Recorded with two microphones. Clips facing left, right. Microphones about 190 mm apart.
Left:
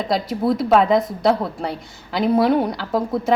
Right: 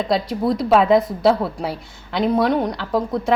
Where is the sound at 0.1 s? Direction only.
Centre (ahead or behind).